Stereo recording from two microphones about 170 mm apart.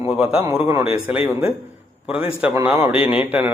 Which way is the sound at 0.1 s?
5° right (ahead or behind).